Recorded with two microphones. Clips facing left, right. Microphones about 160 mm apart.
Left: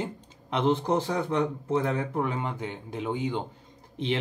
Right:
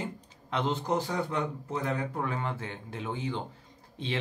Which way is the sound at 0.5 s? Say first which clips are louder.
Left 5 dB; 25° left (ahead or behind).